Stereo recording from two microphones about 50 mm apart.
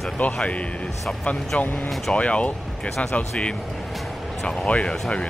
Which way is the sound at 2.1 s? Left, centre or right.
Left.